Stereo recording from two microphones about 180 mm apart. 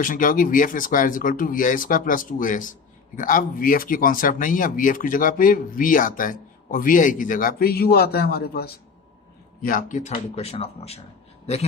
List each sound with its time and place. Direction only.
0.0 s a man's voice: 50° left (ahead or behind)